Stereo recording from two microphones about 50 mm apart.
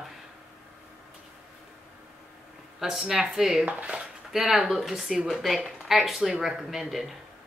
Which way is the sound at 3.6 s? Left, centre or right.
Right.